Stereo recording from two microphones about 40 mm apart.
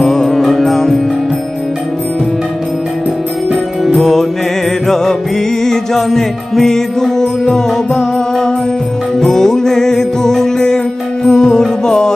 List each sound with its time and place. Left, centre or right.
0.0 s music: centre
4.0 s music: centre